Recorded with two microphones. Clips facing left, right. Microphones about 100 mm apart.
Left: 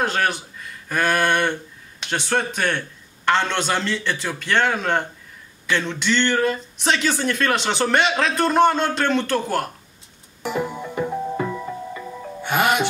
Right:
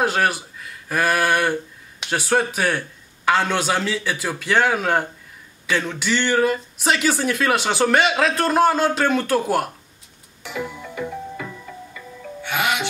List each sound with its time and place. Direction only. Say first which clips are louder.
0.0 s speech: right 2 dB; 5° right (ahead or behind)
10.4 s music: left 5 dB; 45° left (ahead or behind)